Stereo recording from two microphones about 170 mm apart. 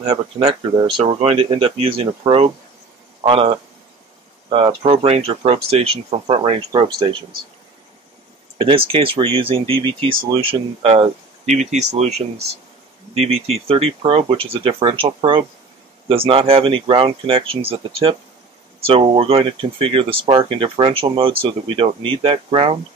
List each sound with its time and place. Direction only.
0.0 s speech: 40° right (ahead or behind)
8.5 s speech: 30° right (ahead or behind)